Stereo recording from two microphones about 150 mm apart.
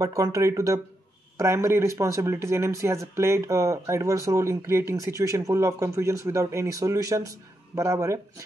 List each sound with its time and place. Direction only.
0.0 s speech: 20° right (ahead or behind)